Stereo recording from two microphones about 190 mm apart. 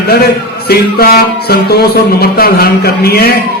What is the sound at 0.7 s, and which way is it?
A man's voice, 55° left (ahead or behind).